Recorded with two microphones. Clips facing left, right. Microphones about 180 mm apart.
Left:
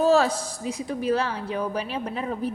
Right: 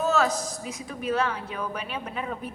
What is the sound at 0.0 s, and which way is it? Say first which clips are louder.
A woman's voice: left 5 dB; 30° left (ahead or behind).